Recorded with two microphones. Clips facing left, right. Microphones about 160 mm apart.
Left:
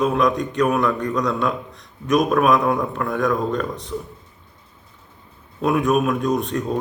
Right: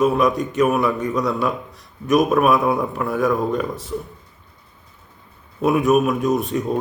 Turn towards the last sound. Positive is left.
turn(degrees=-5)  # may be behind; listen again after turning